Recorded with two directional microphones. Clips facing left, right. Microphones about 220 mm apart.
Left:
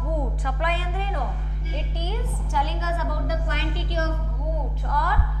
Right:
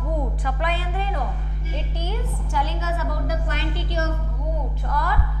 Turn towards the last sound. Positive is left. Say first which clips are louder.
# right 1 dB
turn(degrees=-15)  # may be behind; listen again after turning